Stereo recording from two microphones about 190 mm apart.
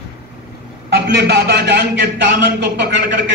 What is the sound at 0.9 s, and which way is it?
Speech, 60° right (ahead or behind).